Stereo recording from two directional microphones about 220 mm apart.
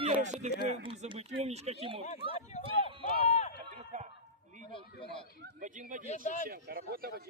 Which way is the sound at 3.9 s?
35° right (ahead or behind).